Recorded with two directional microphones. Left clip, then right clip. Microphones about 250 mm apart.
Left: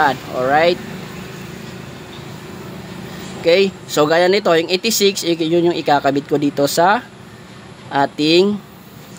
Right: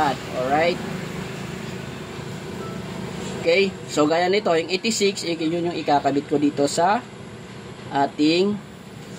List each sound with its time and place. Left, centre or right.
0.0 s speech: left
3.4 s speech: left